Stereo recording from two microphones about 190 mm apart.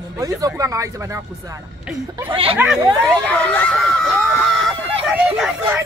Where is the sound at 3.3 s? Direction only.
5° left (ahead or behind).